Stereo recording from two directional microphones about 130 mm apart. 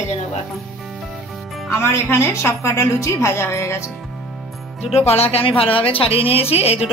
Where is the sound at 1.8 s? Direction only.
20° left (ahead or behind).